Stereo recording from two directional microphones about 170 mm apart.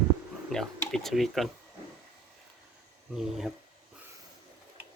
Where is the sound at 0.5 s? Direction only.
5° left (ahead or behind).